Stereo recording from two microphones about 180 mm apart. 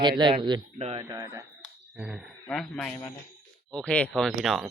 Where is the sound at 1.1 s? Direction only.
20° right (ahead or behind).